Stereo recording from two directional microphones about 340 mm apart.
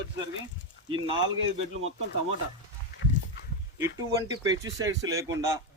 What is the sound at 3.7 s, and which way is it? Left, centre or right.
Speech, centre.